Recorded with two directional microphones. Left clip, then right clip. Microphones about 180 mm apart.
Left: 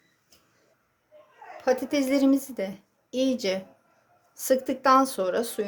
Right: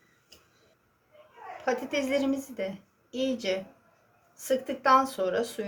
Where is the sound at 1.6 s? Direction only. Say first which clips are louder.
Left 4 dB; 55° left (ahead or behind).